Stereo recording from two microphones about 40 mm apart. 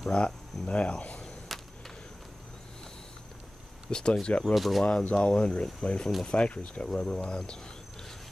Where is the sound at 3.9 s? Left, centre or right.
Centre.